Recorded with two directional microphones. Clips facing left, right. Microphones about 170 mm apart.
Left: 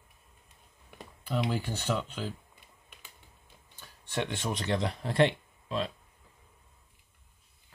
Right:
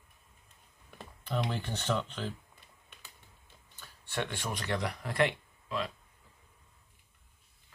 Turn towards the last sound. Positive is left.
turn(degrees=30)  # may be behind; listen again after turning